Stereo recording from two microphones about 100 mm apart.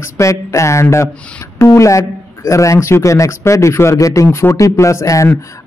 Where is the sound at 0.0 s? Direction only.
30° left (ahead or behind).